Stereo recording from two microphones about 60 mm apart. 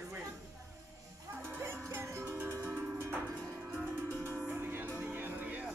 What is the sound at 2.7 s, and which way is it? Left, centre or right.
Music, right.